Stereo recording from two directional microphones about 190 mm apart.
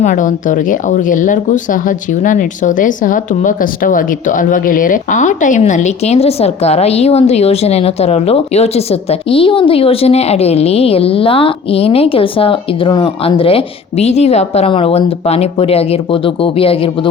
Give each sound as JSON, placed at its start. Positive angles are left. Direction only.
{"t": 0.0, "sound": "speech", "side_deg": 45}